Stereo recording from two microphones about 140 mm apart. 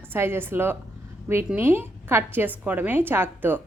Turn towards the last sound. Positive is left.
turn(degrees=-15)  # may be behind; listen again after turning